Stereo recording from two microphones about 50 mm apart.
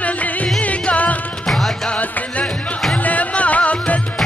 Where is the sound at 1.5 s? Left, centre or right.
Centre.